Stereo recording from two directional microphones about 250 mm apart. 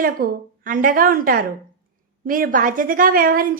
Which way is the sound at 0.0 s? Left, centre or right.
Right.